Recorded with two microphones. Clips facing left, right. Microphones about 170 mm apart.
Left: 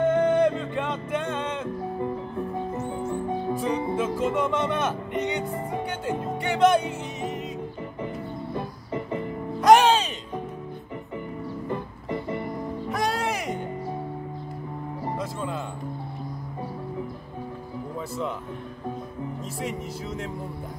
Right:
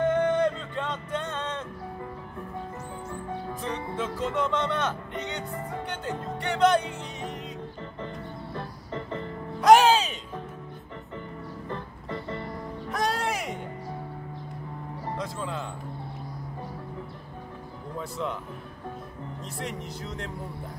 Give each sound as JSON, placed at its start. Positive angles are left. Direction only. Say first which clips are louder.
{"t": 0.1, "sound": "music", "louder": "left 3 dB", "side_deg": 10}
{"t": 2.0, "sound": "music", "louder": "left 9 dB", "side_deg": 20}
{"t": 3.5, "sound": "music", "louder": "left 6 dB", "side_deg": 10}
{"t": 8.5, "sound": "organ", "louder": "left 3 dB", "side_deg": 10}
{"t": 9.6, "sound": "music", "louder": "left 1 dB", "side_deg": 0}
{"t": 11.7, "sound": "music", "louder": "left 4 dB", "side_deg": 15}
{"t": 12.9, "sound": "music", "louder": "left 1 dB", "side_deg": 0}
{"t": 15.0, "sound": "music", "louder": "left 2 dB", "side_deg": 5}
{"t": 19.6, "sound": "speech", "louder": "left 3 dB", "side_deg": 5}